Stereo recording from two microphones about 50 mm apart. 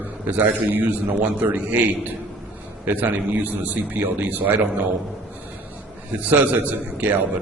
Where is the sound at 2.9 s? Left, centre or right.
Right.